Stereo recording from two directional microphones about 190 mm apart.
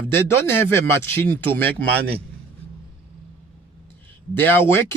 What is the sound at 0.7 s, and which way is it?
A man's voice, 10° left (ahead or behind).